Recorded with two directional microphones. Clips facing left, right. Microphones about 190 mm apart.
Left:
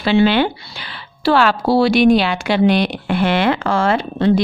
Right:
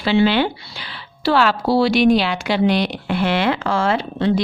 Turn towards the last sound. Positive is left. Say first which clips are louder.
# left 3 dB
turn(degrees=50)  # may be behind; listen again after turning